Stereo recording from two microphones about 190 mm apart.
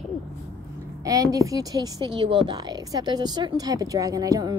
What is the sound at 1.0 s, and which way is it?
Speech, 20° right (ahead or behind).